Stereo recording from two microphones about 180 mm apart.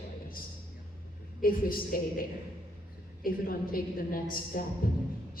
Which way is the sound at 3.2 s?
55° left (ahead or behind).